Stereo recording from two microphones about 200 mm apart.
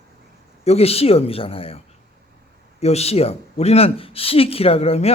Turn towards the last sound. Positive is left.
turn(degrees=30)  # may be behind; listen again after turning